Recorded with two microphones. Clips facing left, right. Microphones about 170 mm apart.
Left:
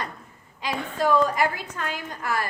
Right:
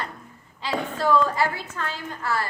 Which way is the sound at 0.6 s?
15° left (ahead or behind).